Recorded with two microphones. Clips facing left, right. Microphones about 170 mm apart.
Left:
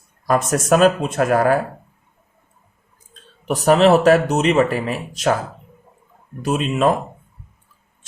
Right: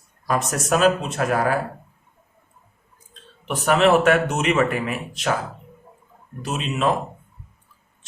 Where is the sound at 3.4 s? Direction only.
40° left (ahead or behind).